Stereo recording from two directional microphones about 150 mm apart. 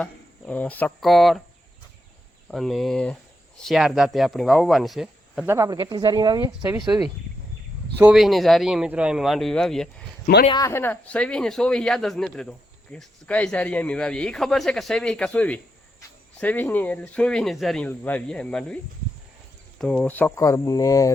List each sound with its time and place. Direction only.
0.0 s speech: 10° left (ahead or behind)
2.5 s speech: centre (ahead or behind)
5.5 s speech: 20° right (ahead or behind)
8.1 s speech: centre (ahead or behind)
10.3 s a man's voice: 70° left (ahead or behind)
10.6 s speech: 15° left (ahead or behind)
19.8 s speech: 5° left (ahead or behind); by 21.1 s 25° left (ahead or behind)